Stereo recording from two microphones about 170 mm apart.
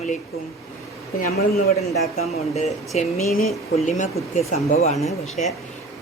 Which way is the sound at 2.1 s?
40° left (ahead or behind).